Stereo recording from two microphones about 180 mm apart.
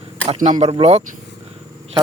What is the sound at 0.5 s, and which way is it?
Speech, 30° right (ahead or behind).